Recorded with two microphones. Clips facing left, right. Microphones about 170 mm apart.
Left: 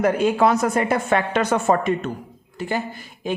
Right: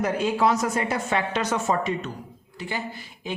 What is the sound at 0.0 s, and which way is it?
A woman's voice, 55° left (ahead or behind).